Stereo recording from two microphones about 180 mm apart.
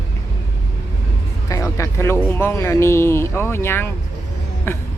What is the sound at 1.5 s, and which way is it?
Speech, 20° left (ahead or behind).